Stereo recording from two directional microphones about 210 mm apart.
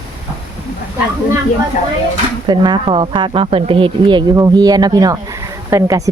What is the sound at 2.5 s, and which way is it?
Speech, 20° right (ahead or behind).